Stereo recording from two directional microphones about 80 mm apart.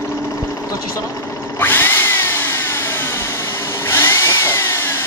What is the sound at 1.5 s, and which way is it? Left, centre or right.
Power tool, left.